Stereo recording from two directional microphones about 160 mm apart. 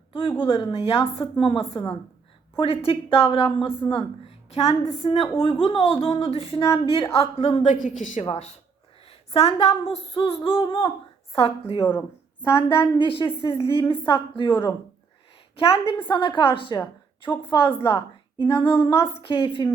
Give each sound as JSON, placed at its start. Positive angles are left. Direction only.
{"t": 0.1, "sound": "speech", "side_deg": 30}
{"t": 7.7, "sound": "a woman's voice", "side_deg": 55}
{"t": 8.2, "sound": "speech", "side_deg": 40}
{"t": 11.8, "sound": "speech", "side_deg": 20}
{"t": 13.0, "sound": "speech", "side_deg": 30}
{"t": 15.5, "sound": "speech", "side_deg": 35}